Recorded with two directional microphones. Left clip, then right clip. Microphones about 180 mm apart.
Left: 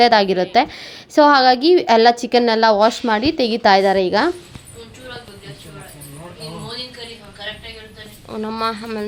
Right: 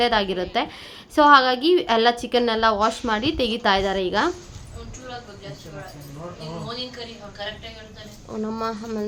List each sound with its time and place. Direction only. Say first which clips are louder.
0.0 s a woman's voice: left 8 dB; 30° left (ahead or behind)
8.3 s speech: left 5 dB; 10° left (ahead or behind)